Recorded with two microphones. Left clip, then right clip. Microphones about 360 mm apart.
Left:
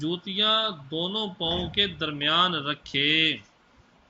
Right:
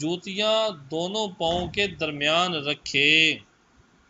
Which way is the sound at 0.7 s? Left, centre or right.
Right.